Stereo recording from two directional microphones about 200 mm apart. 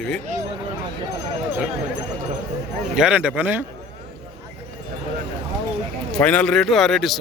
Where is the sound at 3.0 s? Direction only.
5° right (ahead or behind).